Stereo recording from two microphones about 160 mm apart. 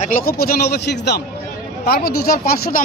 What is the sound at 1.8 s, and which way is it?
Speech, 75° left (ahead or behind).